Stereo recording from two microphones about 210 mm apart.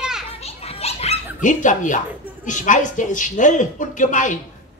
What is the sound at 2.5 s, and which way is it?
Speech, 35° left (ahead or behind).